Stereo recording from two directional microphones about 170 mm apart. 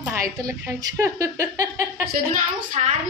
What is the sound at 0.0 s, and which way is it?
A woman's voice, 15° right (ahead or behind).